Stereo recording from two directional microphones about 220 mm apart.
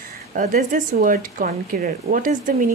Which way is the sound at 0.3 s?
35° right (ahead or behind).